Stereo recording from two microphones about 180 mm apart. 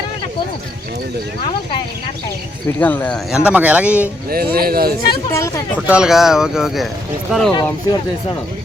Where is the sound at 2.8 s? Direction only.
10° left (ahead or behind).